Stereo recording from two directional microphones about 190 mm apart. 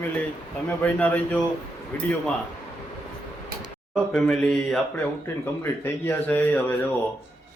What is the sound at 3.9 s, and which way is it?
Speech, centre (ahead or behind).